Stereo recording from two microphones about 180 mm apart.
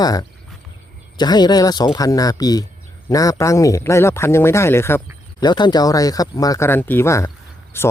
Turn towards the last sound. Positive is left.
turn(degrees=15)  # may be behind; listen again after turning